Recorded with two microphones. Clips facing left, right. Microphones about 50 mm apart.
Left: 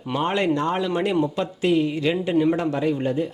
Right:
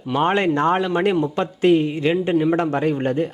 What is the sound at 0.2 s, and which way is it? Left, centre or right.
A man's voice, right.